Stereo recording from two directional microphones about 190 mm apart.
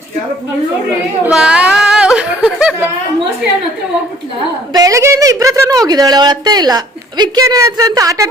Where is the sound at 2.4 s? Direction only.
5° right (ahead or behind).